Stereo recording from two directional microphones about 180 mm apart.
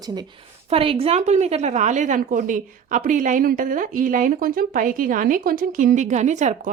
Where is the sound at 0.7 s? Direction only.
30° right (ahead or behind).